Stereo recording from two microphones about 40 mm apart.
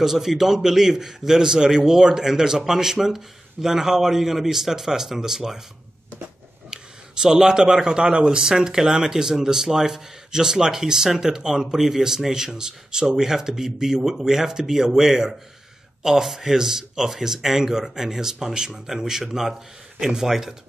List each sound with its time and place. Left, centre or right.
0.0 s a man's voice: centre
6.7 s a man's voice: centre